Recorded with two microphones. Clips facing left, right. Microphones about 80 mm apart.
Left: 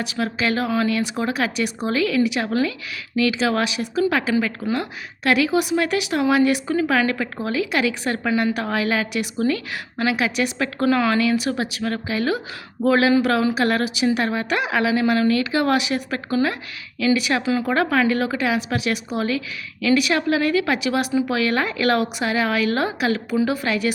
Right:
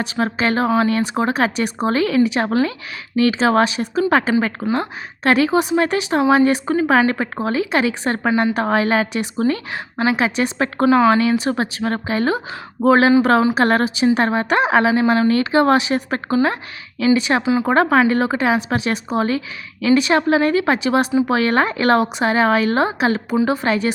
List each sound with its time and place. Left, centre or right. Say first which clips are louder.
0.0 s speech: right 4 dB; right